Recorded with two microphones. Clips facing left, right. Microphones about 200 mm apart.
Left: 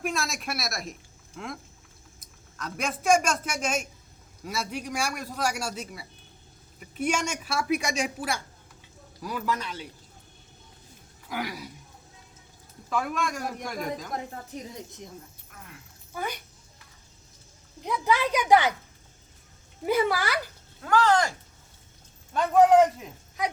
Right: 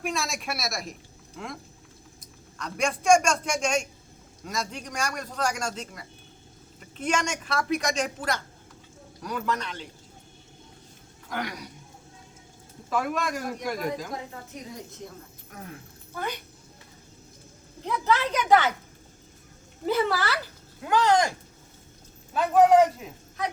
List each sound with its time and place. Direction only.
0.0 s a man's voice: centre (ahead or behind)
11.3 s speech: 5° left (ahead or behind)
12.9 s speech: centre (ahead or behind)
15.5 s speech: 50° right (ahead or behind)
16.1 s a man's voice: 10° left (ahead or behind)
17.8 s a man's voice: 15° left (ahead or behind)
19.8 s a man's voice: 10° left (ahead or behind)
20.8 s speech: 15° right (ahead or behind)
22.3 s speech: centre (ahead or behind)